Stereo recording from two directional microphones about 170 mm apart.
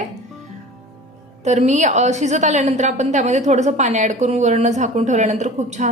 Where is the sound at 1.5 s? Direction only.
40° right (ahead or behind).